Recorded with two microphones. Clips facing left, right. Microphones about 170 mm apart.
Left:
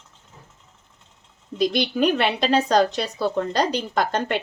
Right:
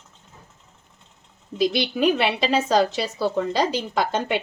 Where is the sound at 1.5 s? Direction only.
5° right (ahead or behind).